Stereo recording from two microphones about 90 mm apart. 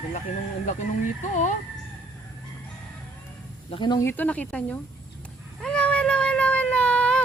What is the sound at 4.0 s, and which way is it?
Speech, 25° left (ahead or behind).